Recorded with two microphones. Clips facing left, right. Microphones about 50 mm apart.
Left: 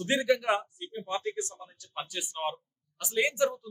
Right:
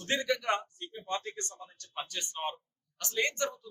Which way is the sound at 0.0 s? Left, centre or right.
Centre.